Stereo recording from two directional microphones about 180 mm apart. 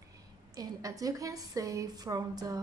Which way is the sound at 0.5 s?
20° right (ahead or behind).